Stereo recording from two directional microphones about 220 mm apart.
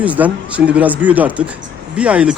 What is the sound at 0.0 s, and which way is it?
A man's voice, 5° right (ahead or behind).